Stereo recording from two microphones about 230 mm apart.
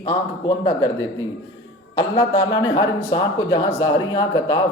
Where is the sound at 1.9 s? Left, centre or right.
Centre.